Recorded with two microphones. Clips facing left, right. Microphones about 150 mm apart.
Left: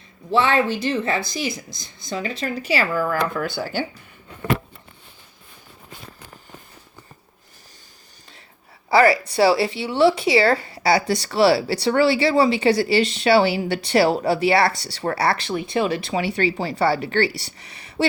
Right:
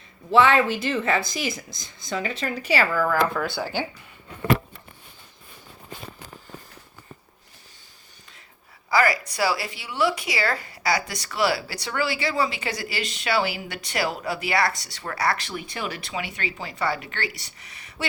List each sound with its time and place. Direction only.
0.3 s speech: 30° left (ahead or behind)
8.9 s speech: 30° left (ahead or behind)